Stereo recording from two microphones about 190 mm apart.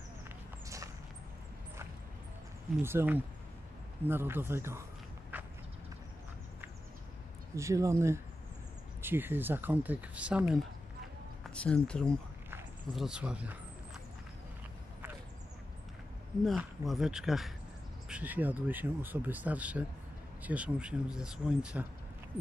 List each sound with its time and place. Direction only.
2.8 s speech: 10° right (ahead or behind)
5.3 s a sound: 10° right (ahead or behind)
7.5 s speech: 15° right (ahead or behind)
11.4 s speech: 5° left (ahead or behind)
16.4 s speech: centre (ahead or behind)